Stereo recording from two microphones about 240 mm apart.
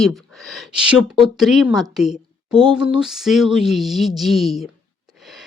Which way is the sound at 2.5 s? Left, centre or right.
Centre.